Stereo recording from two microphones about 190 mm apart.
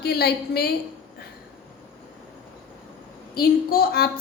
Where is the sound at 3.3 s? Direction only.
55° left (ahead or behind).